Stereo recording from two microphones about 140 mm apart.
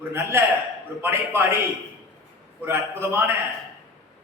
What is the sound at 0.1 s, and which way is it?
A man's voice, 20° right (ahead or behind).